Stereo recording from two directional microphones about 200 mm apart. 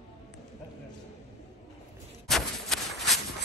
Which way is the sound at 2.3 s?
Centre (ahead or behind).